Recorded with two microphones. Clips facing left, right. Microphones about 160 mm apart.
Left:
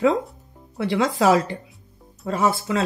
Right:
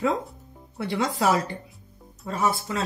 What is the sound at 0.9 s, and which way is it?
Speech, 90° left.